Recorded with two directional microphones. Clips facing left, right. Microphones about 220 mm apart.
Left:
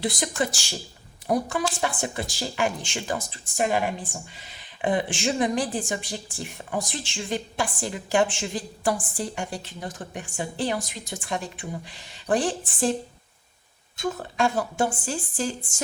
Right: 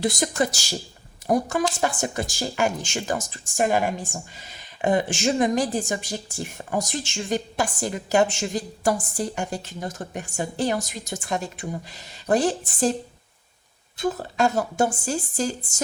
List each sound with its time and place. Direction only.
0.0 s speech: 45° right (ahead or behind)
13.9 s speech: 35° right (ahead or behind)